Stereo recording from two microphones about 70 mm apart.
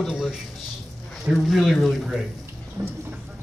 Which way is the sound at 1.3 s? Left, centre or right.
Centre.